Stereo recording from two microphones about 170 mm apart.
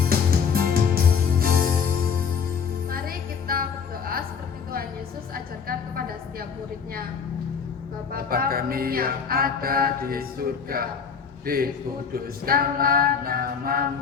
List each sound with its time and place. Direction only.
0.1 s music: 60° right (ahead or behind)
2.9 s music: 60° right (ahead or behind)
8.1 s music: 60° right (ahead or behind)